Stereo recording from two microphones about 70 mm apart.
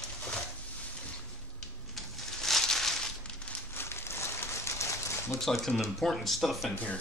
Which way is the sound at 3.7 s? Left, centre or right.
Left.